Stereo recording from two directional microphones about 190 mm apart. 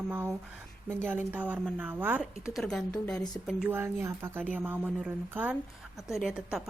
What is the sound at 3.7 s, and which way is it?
A woman's voice, 10° right (ahead or behind).